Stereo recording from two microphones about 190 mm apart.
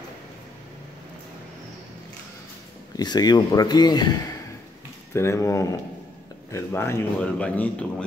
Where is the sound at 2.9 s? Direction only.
20° left (ahead or behind).